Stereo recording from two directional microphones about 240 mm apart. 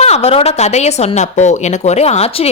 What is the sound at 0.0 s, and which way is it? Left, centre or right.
A woman's voice, left.